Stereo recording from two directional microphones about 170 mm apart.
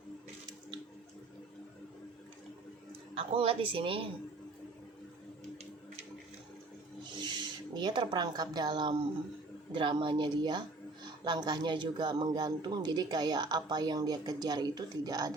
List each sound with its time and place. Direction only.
3.2 s speech: 35° right (ahead or behind)
7.1 s speech: 25° right (ahead or behind)